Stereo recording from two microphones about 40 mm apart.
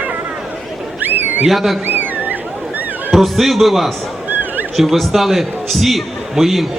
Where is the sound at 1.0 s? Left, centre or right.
Right.